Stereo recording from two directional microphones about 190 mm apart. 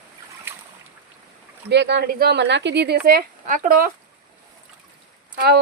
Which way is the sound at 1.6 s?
65° right (ahead or behind).